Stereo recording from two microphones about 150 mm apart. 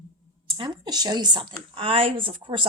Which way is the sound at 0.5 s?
30° right (ahead or behind).